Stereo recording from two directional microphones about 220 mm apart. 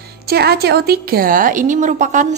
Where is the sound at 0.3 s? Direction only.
45° right (ahead or behind).